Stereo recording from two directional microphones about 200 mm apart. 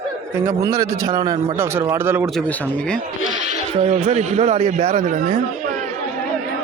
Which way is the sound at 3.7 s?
35° right (ahead or behind).